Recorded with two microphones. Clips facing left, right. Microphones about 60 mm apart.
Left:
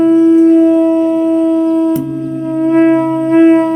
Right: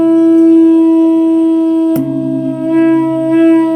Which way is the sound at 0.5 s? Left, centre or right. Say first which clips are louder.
Right 2 dB; left.